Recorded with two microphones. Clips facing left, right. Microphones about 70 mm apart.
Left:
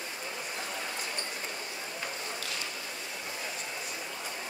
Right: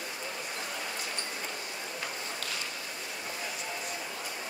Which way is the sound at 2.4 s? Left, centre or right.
Right.